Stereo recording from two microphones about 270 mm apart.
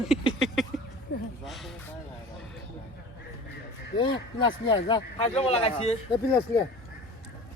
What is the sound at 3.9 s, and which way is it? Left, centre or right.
Speech, centre.